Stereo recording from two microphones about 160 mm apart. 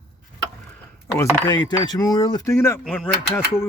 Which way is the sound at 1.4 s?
25° left (ahead or behind).